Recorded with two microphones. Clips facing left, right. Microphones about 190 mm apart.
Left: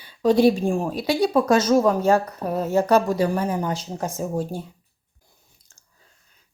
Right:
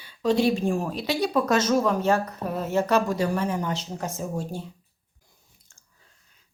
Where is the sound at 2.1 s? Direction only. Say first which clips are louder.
Left 4 dB; 35° left (ahead or behind).